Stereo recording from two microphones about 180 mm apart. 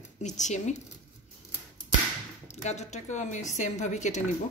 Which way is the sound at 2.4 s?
40° left (ahead or behind).